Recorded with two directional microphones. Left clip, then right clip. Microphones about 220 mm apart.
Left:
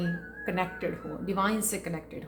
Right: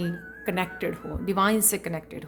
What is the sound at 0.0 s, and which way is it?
A woman's voice, 45° right (ahead or behind).